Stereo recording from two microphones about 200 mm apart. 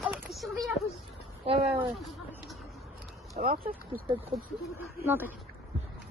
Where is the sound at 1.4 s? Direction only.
30° right (ahead or behind).